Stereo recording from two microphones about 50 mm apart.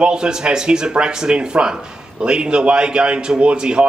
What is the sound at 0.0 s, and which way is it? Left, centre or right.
A man's voice, centre.